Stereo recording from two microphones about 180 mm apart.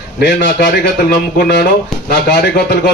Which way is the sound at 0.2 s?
70° left (ahead or behind).